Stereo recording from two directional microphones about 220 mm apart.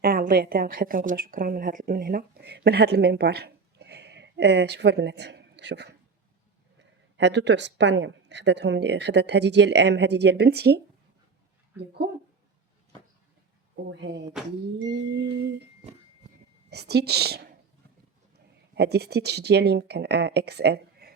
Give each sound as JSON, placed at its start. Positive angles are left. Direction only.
{"t": 0.0, "sound": "a woman's voice", "side_deg": -40}
{"t": 14.0, "sound": "speech", "side_deg": -50}
{"t": 16.6, "sound": "speech", "side_deg": -50}
{"t": 18.7, "sound": "speech", "side_deg": -50}